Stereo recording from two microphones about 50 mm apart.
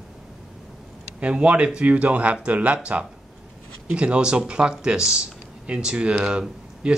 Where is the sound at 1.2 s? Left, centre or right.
Right.